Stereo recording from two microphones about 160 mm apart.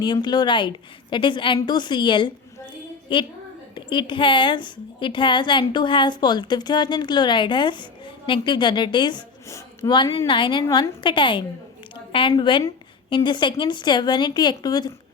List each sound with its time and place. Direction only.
0.0 s a woman's voice: 25° left (ahead or behind)